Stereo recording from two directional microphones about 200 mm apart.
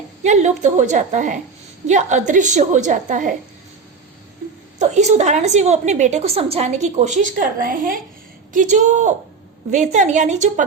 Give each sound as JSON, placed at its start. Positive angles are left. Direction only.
{"t": 0.2, "sound": "a woman's voice", "side_deg": -35}
{"t": 4.8, "sound": "a woman's voice", "side_deg": -35}